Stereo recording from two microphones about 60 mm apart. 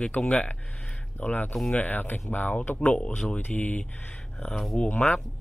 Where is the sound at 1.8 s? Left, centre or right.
Left.